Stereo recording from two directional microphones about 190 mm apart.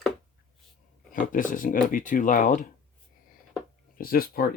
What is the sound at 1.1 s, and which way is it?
Speech, 45° left (ahead or behind).